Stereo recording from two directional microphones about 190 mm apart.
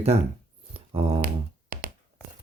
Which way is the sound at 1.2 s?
55° right (ahead or behind).